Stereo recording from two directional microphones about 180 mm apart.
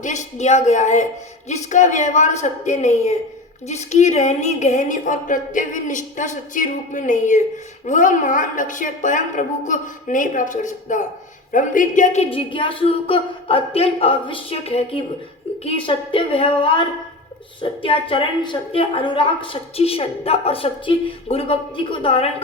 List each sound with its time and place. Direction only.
0.0 s a woman's voice: 40° left (ahead or behind)